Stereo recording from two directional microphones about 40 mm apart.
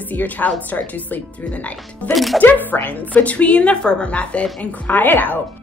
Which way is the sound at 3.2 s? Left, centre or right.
Left.